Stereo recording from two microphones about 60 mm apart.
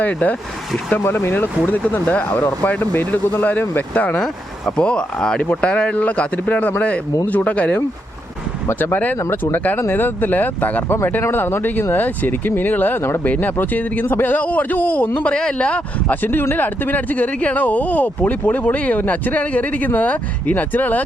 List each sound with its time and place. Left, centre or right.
0.0 s speech: left
0.9 s speech: left
4.8 s speech: centre
8.8 s speech: left
16.2 s speech: left